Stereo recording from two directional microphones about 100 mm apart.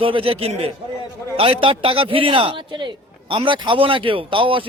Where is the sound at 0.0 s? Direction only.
60° right (ahead or behind).